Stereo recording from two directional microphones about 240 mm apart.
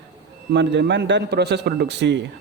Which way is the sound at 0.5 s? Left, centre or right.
Right.